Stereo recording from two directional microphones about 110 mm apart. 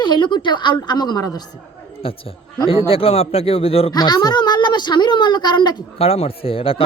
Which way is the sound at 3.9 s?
40° left (ahead or behind).